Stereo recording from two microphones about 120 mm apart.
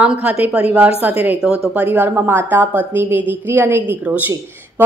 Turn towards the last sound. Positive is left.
turn(degrees=-15)  # may be behind; listen again after turning